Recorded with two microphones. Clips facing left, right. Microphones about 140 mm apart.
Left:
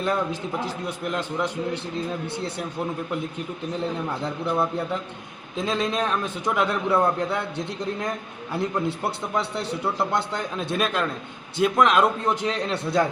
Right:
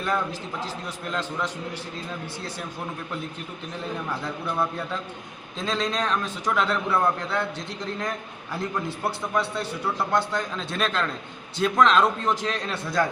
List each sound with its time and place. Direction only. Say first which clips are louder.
0.0 s a man's voice: left 2 dB; 20° left (ahead or behind)
3.8 s a man's voice: left 2 dB; 20° left (ahead or behind)
9.0 s a man's voice: even; 25° left (ahead or behind)